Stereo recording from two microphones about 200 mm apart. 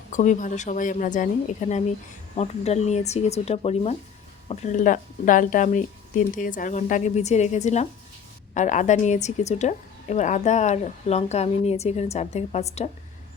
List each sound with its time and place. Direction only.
0.1 s a woman's voice: 40° left (ahead or behind)